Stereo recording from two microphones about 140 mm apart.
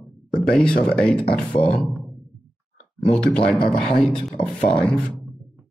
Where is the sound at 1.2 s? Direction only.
40° left (ahead or behind).